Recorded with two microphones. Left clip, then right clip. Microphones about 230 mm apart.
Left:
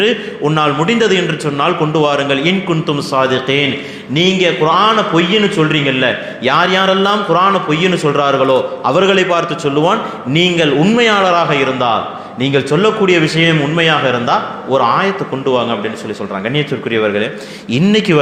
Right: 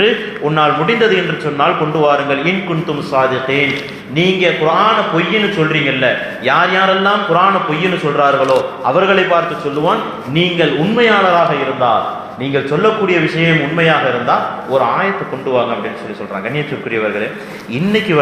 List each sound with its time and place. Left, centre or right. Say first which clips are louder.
0.0 s a man's voice: even; left